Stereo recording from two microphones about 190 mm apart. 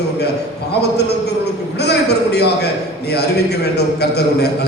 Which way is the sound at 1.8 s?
60° left (ahead or behind).